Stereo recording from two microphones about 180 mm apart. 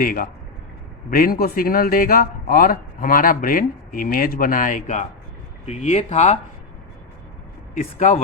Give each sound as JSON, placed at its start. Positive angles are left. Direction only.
{"t": 0.0, "sound": "a man's voice", "side_deg": 50}
{"t": 7.8, "sound": "a man's voice", "side_deg": 45}